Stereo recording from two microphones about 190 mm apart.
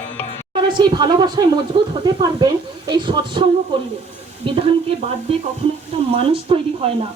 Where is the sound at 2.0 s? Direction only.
20° right (ahead or behind).